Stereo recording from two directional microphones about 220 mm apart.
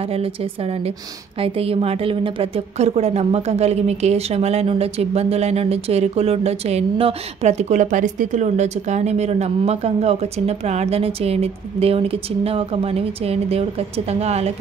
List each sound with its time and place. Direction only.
0.1 s a woman's voice: 25° right (ahead or behind)